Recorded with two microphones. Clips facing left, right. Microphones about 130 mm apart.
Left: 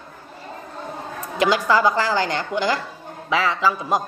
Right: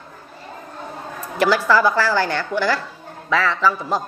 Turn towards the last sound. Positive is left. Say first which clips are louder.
# right 1 dB
turn(degrees=15)  # may be behind; listen again after turning